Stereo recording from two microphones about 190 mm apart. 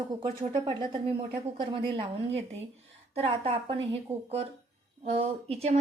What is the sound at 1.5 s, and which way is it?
A woman's voice, 25° right (ahead or behind).